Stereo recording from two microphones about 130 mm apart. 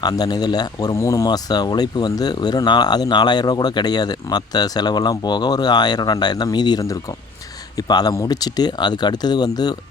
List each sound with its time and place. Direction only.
0.0 s speech: 30° left (ahead or behind)